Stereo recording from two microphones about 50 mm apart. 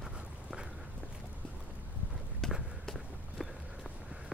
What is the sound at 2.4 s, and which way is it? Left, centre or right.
Run, centre.